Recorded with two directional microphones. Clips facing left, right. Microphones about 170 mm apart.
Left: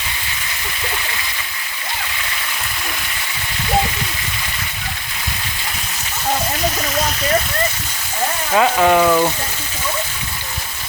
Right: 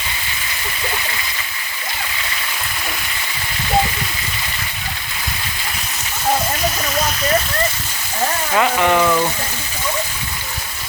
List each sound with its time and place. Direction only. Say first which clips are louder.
8.5 s speech: left 3 dB; 20° left (ahead or behind)